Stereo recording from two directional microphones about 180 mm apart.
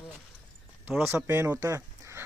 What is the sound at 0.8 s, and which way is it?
Speech, 10° right (ahead or behind).